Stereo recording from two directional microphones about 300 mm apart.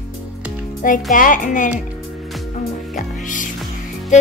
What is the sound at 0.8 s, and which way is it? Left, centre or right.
Speech, left.